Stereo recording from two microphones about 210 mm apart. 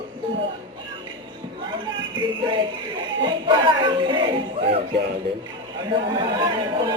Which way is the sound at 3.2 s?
25° right (ahead or behind).